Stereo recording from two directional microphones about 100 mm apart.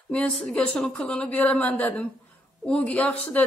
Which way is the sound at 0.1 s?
10° left (ahead or behind).